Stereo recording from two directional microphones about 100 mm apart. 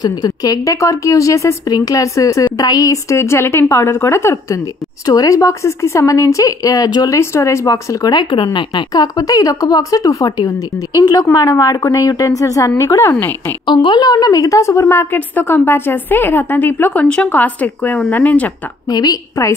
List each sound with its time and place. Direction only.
0.0 s a woman's voice: 40° left (ahead or behind)
5.0 s speech: 40° left (ahead or behind)
7.2 s a woman's voice: 30° left (ahead or behind); by 9.0 s 55° left (ahead or behind)
9.0 s speech: 40° left (ahead or behind)
13.7 s a woman's voice: 50° left (ahead or behind); by 18.5 s 15° left (ahead or behind)
18.9 s speech: 40° left (ahead or behind)